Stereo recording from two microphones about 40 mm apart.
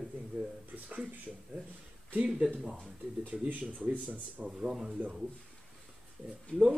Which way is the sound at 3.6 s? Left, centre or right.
Right.